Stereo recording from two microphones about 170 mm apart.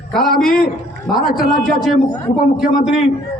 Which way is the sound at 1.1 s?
60° left (ahead or behind).